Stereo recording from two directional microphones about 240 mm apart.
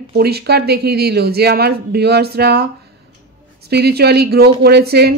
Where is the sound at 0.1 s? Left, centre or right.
Right.